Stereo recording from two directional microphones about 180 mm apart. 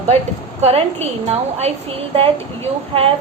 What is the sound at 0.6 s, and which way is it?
A woman's voice, 35° right (ahead or behind).